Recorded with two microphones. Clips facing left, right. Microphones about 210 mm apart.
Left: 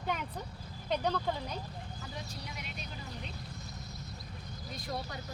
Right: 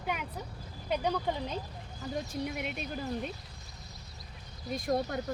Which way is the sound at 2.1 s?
55° right (ahead or behind).